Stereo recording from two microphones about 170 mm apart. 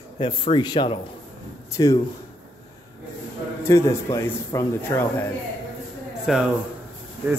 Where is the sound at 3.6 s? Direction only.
15° left (ahead or behind).